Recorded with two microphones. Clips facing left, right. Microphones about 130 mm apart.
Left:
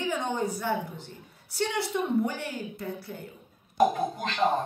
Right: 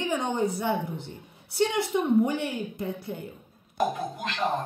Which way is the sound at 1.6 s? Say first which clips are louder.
Right 4 dB; 20° right (ahead or behind).